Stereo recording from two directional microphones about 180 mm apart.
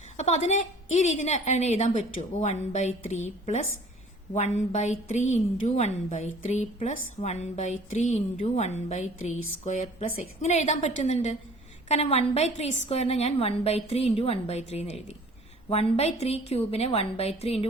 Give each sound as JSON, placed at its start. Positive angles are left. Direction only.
{"t": 0.2, "sound": "a woman's voice", "side_deg": 40}